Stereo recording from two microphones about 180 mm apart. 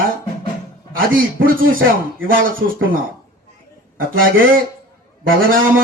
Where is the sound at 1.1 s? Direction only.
50° right (ahead or behind).